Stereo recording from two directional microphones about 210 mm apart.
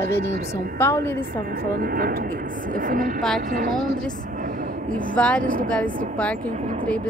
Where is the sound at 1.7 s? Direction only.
45° right (ahead or behind).